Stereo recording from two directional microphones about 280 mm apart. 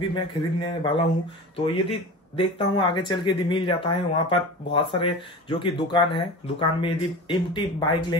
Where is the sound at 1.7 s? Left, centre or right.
Centre.